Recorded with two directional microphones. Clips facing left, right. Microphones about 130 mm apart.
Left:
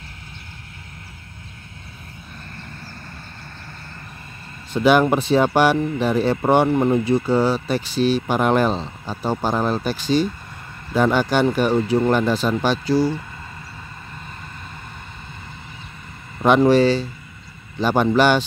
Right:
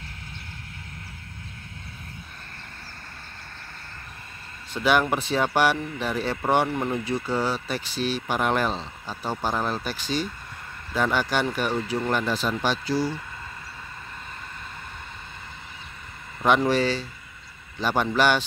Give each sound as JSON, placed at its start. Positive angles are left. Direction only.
{"t": 4.7, "sound": "speech", "side_deg": 25}
{"t": 16.4, "sound": "speech", "side_deg": 30}